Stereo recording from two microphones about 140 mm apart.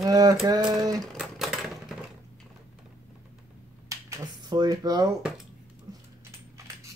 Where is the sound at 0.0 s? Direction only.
25° right (ahead or behind).